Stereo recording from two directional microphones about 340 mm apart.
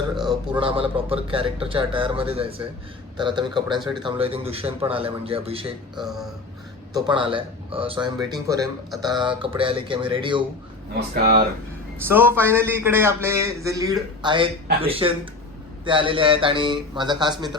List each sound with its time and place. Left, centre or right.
0.3 s a man's voice: centre
11.1 s speech: right
12.0 s a man's voice: centre